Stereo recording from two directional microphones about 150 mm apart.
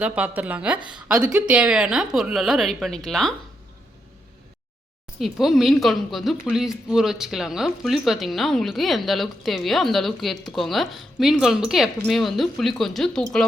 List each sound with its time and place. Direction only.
0.0 s a woman's voice: 10° right (ahead or behind)
5.2 s a woman's voice: centre (ahead or behind)